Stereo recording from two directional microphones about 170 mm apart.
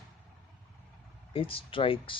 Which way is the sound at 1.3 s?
30° left (ahead or behind).